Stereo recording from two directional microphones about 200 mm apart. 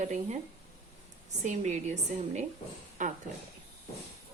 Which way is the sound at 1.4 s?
35° right (ahead or behind).